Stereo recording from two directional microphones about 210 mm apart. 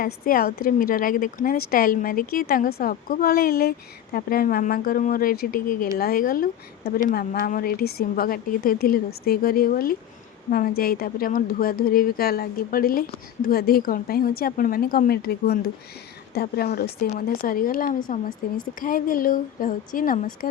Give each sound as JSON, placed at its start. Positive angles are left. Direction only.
{"t": 0.0, "sound": "a woman's voice", "side_deg": 45}